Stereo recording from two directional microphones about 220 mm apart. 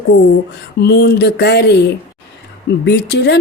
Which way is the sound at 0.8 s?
50° left (ahead or behind).